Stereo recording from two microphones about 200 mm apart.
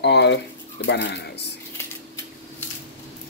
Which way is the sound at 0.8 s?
60° left (ahead or behind).